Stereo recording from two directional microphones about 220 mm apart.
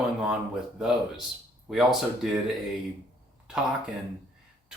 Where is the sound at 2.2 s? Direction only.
Centre (ahead or behind).